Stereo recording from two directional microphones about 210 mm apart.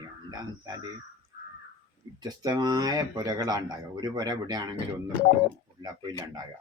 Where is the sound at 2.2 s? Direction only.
20° right (ahead or behind).